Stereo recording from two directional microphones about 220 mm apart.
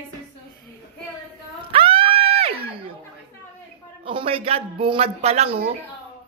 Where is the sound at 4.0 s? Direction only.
25° right (ahead or behind).